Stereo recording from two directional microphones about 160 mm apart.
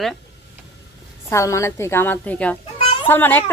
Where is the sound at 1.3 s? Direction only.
20° left (ahead or behind).